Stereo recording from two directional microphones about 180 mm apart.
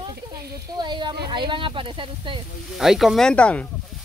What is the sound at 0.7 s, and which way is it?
Speech, 25° right (ahead or behind).